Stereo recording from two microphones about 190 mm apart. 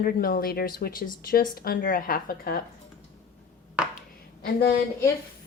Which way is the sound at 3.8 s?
5° right (ahead or behind).